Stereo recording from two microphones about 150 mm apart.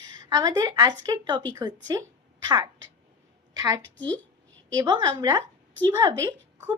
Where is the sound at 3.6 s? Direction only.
25° right (ahead or behind).